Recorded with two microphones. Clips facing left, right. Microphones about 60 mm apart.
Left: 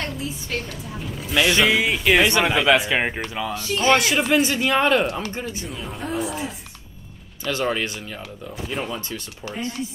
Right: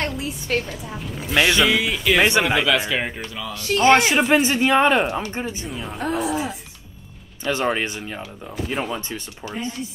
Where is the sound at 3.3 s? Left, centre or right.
Left.